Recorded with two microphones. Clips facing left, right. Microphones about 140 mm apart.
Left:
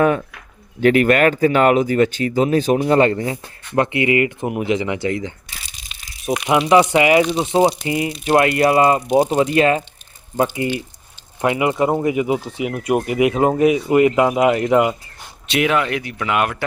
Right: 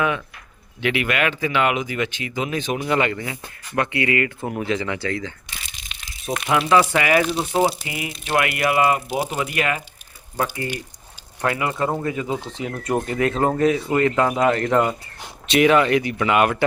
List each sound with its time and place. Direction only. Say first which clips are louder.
0.0 s speech: left 7 dB; 40° left (ahead or behind)
3.8 s speech: left 5 dB; 20° left (ahead or behind)
5.6 s a sound: even; centre (ahead or behind)
6.7 s speech: left 5 dB; 20° left (ahead or behind)
7.3 s speech: left 4 dB; centre (ahead or behind)
7.9 s speech: left 9 dB; 30° left (ahead or behind)
10.3 s speech: left 6 dB; 15° left (ahead or behind); by 16.6 s centre (ahead or behind)